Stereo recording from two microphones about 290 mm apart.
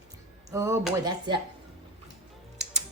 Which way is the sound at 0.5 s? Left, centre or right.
Centre.